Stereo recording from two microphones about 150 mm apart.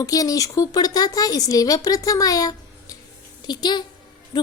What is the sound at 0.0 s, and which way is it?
A woman's voice, 25° left (ahead or behind).